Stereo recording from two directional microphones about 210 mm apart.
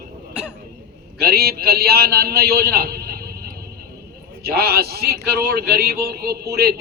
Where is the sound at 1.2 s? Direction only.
45° right (ahead or behind).